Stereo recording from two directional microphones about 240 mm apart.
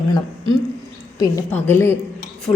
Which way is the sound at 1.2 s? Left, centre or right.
Centre.